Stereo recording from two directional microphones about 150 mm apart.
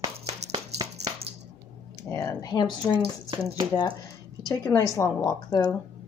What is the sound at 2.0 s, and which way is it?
Speech, 20° left (ahead or behind).